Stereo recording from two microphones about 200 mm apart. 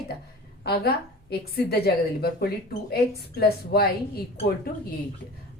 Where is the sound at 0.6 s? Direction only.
50° left (ahead or behind).